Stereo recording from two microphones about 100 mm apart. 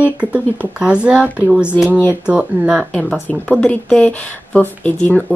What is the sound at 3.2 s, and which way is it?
Speech, 15° left (ahead or behind).